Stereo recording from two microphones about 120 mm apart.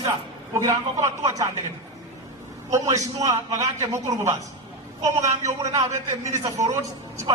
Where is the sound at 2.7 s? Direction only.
25° right (ahead or behind).